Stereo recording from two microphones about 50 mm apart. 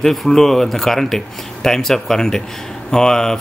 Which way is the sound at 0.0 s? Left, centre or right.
Centre.